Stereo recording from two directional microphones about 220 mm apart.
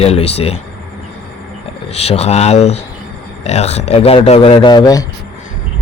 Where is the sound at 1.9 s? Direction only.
30° left (ahead or behind).